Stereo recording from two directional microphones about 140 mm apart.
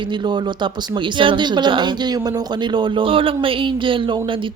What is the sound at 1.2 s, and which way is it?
Speech, 35° right (ahead or behind).